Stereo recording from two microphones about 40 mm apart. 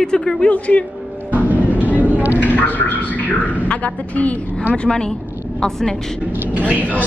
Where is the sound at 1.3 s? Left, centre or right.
Right.